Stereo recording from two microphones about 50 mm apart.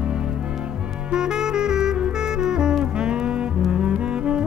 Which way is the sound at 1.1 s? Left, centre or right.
Centre.